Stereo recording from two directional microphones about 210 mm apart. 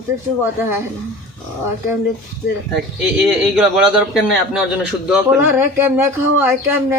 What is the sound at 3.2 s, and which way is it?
A man's voice, centre (ahead or behind).